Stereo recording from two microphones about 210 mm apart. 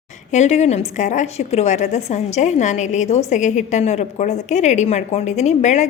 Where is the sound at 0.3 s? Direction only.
35° left (ahead or behind).